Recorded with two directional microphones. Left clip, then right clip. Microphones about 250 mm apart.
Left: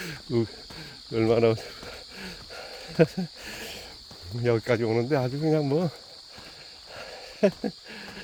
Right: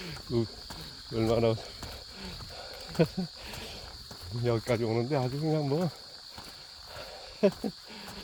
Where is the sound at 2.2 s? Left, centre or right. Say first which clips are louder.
Left 3 dB; left.